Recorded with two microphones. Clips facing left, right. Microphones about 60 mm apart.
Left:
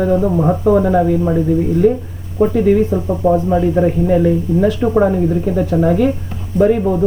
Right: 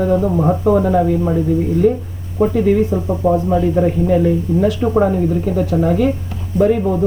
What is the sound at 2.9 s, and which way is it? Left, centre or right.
Speech, centre.